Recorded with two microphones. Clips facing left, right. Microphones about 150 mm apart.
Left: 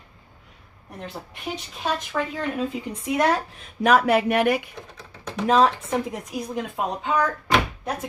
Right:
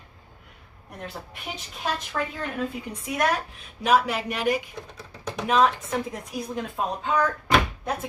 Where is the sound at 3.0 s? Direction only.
25° left (ahead or behind).